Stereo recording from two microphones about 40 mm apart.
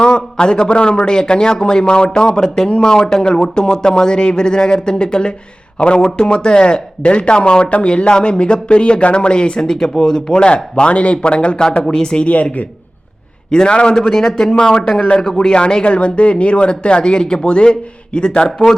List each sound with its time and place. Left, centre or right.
0.0 s speech: left
13.5 s speech: left